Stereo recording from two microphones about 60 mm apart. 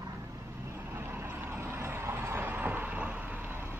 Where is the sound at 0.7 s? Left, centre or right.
Right.